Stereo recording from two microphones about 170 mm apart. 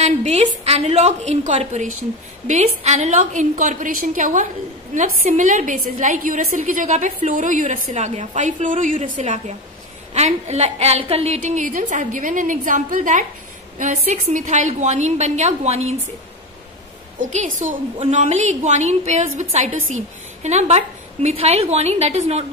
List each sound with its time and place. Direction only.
0.0 s a woman's voice: 40° right (ahead or behind)
17.2 s a woman's voice: 45° right (ahead or behind)